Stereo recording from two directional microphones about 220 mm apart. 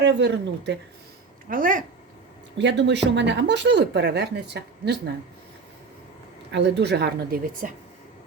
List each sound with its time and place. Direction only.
0.0 s a woman's voice: 50° right (ahead or behind)
1.5 s speech: 40° right (ahead or behind)
2.6 s a woman's voice: 55° right (ahead or behind)
6.5 s a woman's voice: 50° right (ahead or behind)